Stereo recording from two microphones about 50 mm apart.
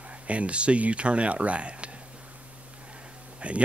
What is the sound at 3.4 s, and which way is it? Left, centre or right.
Speech, right.